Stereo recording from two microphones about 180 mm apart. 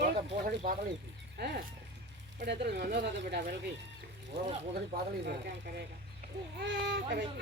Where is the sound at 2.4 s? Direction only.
70° right (ahead or behind).